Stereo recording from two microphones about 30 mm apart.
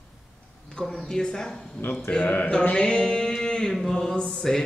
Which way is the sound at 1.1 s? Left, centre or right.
Left.